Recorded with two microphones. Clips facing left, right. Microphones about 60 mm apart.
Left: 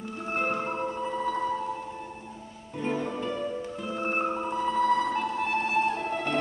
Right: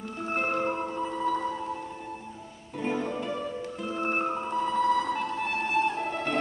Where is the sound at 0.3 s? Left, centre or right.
Centre.